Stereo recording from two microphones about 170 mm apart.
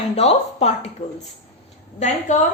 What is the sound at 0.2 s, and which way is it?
Speech, 40° left (ahead or behind).